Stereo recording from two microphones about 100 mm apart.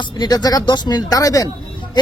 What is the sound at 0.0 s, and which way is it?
A woman's voice, 40° left (ahead or behind).